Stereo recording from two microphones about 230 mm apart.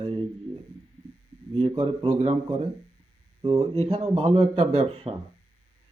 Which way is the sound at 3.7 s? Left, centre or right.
Right.